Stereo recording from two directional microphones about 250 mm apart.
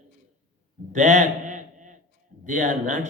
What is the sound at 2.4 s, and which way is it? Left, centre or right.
Speech, right.